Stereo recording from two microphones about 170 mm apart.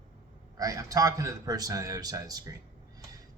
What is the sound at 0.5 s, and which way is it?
Speech, 20° right (ahead or behind).